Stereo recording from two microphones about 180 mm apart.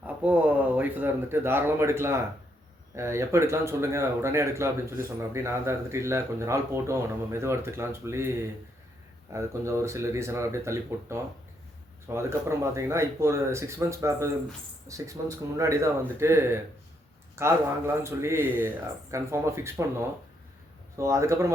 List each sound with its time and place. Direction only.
0.2 s speech: 10° right (ahead or behind)